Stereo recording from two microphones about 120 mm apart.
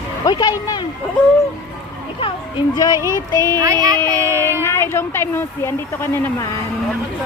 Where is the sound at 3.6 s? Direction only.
30° right (ahead or behind).